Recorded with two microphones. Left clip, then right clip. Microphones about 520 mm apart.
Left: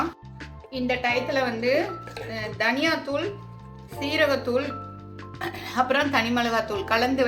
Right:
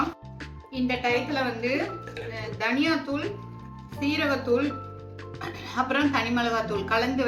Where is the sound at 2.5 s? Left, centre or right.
Centre.